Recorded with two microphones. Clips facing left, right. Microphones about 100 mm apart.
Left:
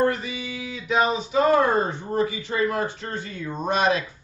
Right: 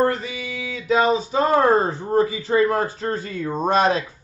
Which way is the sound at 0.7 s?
35° right (ahead or behind).